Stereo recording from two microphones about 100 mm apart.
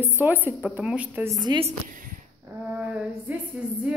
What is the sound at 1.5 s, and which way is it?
Speech, 50° right (ahead or behind).